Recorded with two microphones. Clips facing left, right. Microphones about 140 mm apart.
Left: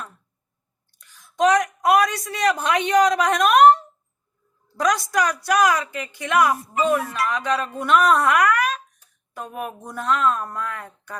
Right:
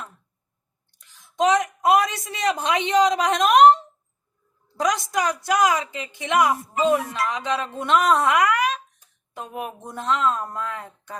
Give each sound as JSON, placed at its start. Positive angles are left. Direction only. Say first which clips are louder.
{"t": 0.9, "sound": "a woman's voice", "louder": "even", "side_deg": -15}